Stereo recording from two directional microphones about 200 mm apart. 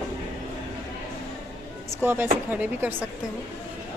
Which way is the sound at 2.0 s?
10° right (ahead or behind).